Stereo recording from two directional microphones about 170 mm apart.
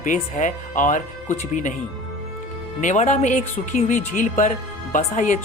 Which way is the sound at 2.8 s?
45° left (ahead or behind).